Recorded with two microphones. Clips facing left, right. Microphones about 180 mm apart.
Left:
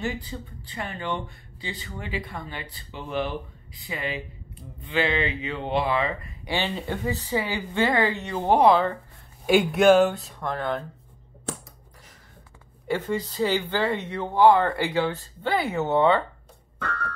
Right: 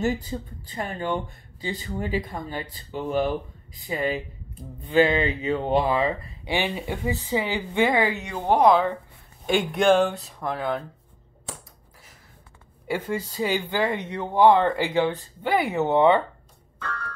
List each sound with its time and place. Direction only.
0.0 s speech: 40° right (ahead or behind)
6.4 s speech: 15° right (ahead or behind)
8.4 s speech: 10° left (ahead or behind)
12.8 s speech: 10° right (ahead or behind)